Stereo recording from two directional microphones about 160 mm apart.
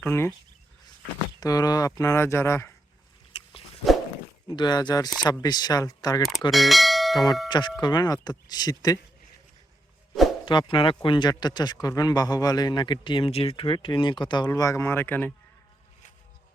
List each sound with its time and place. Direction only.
0.0 s speech: 15° left (ahead or behind)
1.4 s speech: 25° left (ahead or behind)
3.3 s dog: 35° left (ahead or behind)
4.4 s speech: 25° left (ahead or behind)
6.5 s bell: centre (ahead or behind)
7.4 s speech: 30° left (ahead or behind)
10.4 s speech: 30° left (ahead or behind); by 15.3 s 10° left (ahead or behind)